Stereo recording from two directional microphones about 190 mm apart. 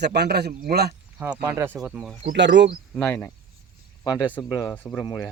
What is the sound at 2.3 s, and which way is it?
Speech, 70° right (ahead or behind).